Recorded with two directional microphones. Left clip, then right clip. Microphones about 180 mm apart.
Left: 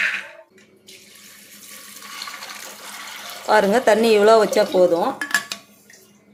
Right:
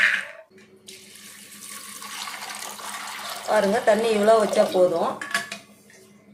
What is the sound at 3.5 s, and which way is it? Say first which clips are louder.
Speech: left 4 dB; 55° left (ahead or behind).